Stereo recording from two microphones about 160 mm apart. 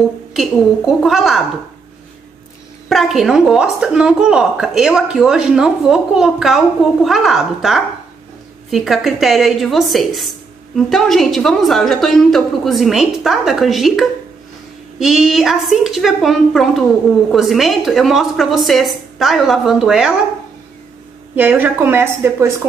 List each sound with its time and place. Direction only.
0.3 s a woman's voice: centre (ahead or behind)
2.9 s a woman's voice: centre (ahead or behind)
21.4 s a woman's voice: 10° right (ahead or behind)